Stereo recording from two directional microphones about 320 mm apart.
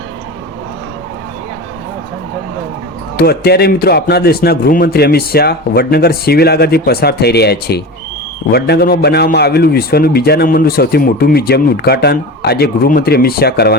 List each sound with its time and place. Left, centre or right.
3.2 s a man's voice: left